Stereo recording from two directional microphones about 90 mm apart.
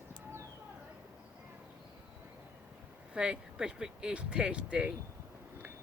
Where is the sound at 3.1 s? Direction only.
10° right (ahead or behind).